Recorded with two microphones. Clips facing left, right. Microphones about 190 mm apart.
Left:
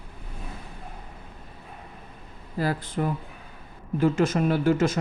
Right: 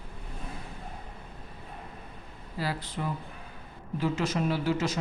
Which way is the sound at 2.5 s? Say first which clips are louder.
Left 7 dB; 50° left (ahead or behind).